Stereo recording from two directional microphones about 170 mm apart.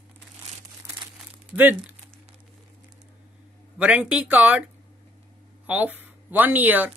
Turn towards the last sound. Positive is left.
turn(degrees=-10)  # may be behind; listen again after turning